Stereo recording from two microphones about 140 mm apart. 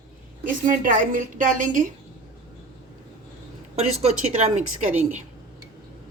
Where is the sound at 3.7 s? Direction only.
50° right (ahead or behind).